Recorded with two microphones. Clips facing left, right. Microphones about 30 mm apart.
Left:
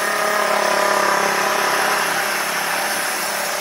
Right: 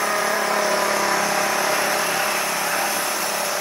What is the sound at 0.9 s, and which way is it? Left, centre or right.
Vehicle, left.